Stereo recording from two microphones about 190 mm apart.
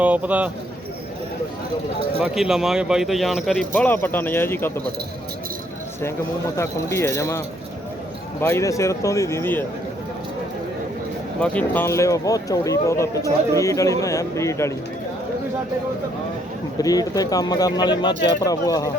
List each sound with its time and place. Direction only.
0.0 s a man's voice: 10° right (ahead or behind)
2.1 s speech: 5° right (ahead or behind)
6.6 s speech: 15° left (ahead or behind)
11.3 s speech: 10° left (ahead or behind)
16.7 s speech: 20° left (ahead or behind)